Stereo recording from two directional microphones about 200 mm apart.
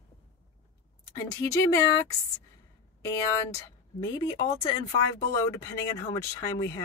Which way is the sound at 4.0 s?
20° left (ahead or behind).